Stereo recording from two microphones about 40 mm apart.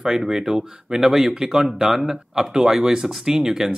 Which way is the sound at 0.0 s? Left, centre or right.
Centre.